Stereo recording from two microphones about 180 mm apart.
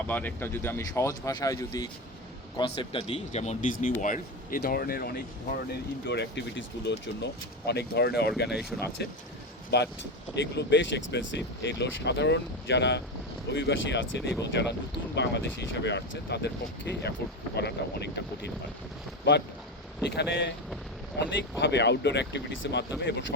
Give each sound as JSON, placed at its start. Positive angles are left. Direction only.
{"t": 0.1, "sound": "speech", "side_deg": 10}
{"t": 6.1, "sound": "speech", "side_deg": 75}
{"t": 8.7, "sound": "speech", "side_deg": -5}
{"t": 9.7, "sound": "speech", "side_deg": 70}
{"t": 13.5, "sound": "speech", "side_deg": 90}
{"t": 20.1, "sound": "speech", "side_deg": 75}